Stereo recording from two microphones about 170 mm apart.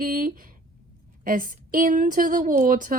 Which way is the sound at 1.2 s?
55° right (ahead or behind).